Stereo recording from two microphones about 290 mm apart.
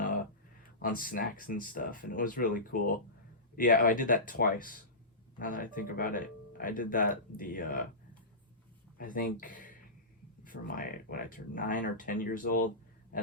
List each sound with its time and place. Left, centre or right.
0.8 s speech: left
9.0 s speech: left